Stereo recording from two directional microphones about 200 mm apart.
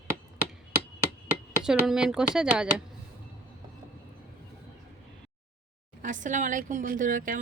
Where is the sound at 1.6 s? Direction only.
5° right (ahead or behind).